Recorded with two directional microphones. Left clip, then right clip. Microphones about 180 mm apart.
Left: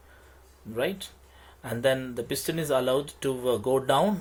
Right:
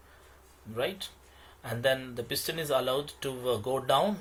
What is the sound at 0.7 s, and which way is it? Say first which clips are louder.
Speech: left 3 dB; 55° left (ahead or behind).